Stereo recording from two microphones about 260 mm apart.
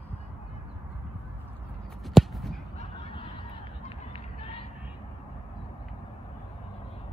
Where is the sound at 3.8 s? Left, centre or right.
Left.